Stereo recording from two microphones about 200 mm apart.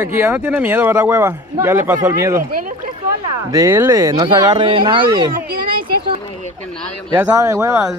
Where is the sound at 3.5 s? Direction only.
15° right (ahead or behind).